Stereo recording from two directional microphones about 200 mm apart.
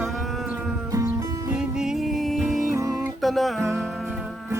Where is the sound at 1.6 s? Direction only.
5° right (ahead or behind).